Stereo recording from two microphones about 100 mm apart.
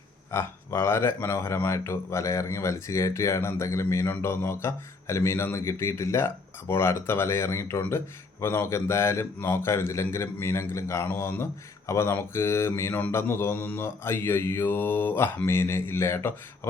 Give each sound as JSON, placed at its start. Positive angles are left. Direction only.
{"t": 0.3, "sound": "speech", "side_deg": 25}